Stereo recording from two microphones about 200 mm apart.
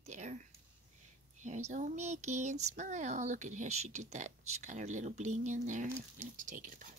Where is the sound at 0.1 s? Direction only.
35° right (ahead or behind).